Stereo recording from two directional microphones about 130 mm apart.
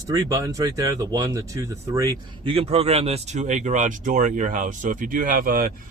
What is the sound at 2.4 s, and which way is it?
Speech, 50° right (ahead or behind).